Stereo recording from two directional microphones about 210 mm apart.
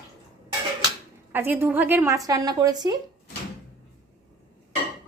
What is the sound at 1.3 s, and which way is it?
A woman's voice, 10° right (ahead or behind).